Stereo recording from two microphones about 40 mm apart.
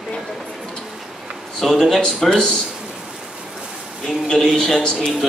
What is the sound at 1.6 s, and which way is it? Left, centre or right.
Speech, centre.